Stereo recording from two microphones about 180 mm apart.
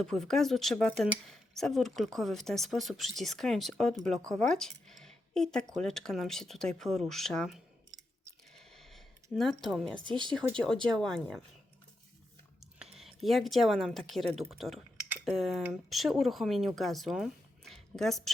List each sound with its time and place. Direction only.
0.0 s speech: centre (ahead or behind)
8.5 s a sound: centre (ahead or behind)
10.1 s speech: 25° right (ahead or behind)
10.8 s speech: 5° left (ahead or behind)
13.2 s speech: centre (ahead or behind)